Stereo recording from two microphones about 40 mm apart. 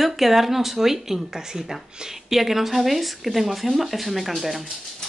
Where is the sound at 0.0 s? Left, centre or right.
Centre.